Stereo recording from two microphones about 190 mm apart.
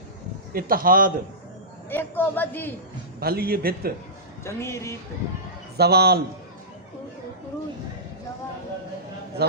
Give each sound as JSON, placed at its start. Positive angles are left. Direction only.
{"t": 0.5, "sound": "a man's voice", "side_deg": -50}
{"t": 1.9, "sound": "a woman's voice", "side_deg": 10}
{"t": 3.2, "sound": "a man's voice", "side_deg": -55}
{"t": 4.4, "sound": "a woman's voice", "side_deg": 15}
{"t": 5.7, "sound": "a man's voice", "side_deg": -55}
{"t": 9.4, "sound": "a man's voice", "side_deg": -60}